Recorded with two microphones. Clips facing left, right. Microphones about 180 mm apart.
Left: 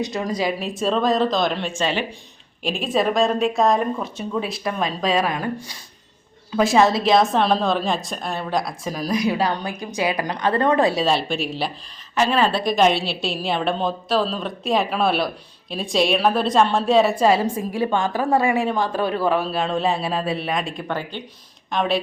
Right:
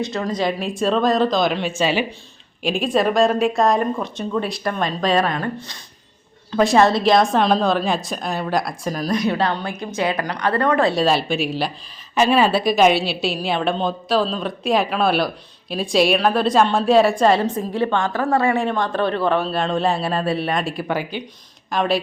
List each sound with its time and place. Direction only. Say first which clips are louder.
0.0 s a woman's voice: right 1 dB; 15° left (ahead or behind)
10.9 s a woman's voice: right 2 dB; centre (ahead or behind)
12.1 s a woman's voice: right 3 dB; 15° right (ahead or behind)